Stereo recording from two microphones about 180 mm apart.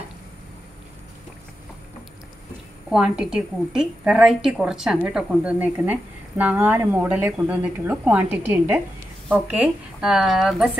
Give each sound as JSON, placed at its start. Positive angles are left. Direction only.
{"t": 2.9, "sound": "a woman's voice", "side_deg": -5}